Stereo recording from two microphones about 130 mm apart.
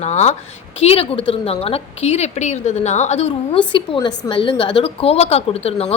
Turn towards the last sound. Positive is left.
turn(degrees=50)  # may be behind; listen again after turning